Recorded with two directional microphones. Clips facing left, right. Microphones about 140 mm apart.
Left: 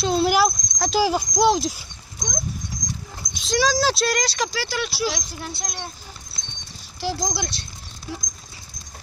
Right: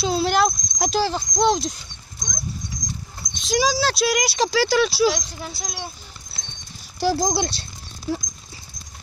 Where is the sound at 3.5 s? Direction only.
15° right (ahead or behind).